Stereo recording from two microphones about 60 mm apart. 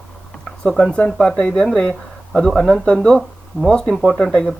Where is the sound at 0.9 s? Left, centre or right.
Centre.